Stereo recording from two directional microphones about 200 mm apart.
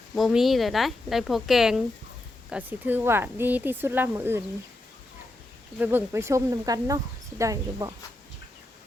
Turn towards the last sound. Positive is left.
turn(degrees=-15)  # may be behind; listen again after turning